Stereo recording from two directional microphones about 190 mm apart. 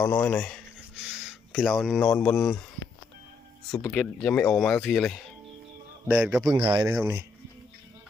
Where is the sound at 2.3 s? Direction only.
Centre (ahead or behind).